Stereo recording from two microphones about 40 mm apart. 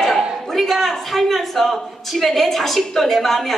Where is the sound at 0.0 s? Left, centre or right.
Centre.